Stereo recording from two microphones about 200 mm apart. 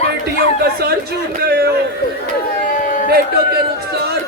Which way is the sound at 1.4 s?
55° right (ahead or behind).